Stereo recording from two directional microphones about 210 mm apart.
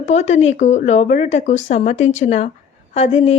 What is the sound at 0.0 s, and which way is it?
A woman's voice, 30° left (ahead or behind).